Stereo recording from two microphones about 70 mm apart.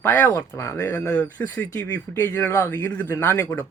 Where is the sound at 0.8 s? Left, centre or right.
Left.